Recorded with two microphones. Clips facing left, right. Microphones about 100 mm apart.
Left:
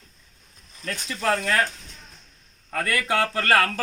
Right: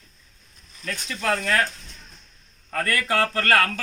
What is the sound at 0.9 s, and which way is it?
Speech, 20° left (ahead or behind).